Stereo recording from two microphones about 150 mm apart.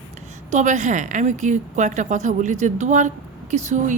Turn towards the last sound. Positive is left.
turn(degrees=-50)  # may be behind; listen again after turning